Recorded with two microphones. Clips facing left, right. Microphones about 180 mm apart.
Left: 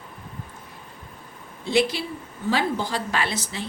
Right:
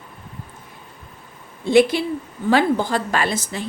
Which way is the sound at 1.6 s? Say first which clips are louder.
Right 7 dB; 50° right (ahead or behind).